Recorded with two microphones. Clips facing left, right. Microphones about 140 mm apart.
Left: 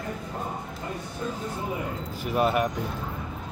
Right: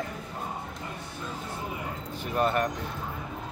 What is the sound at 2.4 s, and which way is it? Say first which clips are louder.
Speech: left 2 dB; 5° left (ahead or behind).